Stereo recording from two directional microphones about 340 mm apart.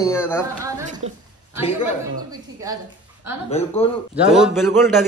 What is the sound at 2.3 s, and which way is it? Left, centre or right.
Speech, centre.